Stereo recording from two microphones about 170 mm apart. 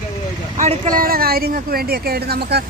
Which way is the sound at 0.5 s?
45° right (ahead or behind).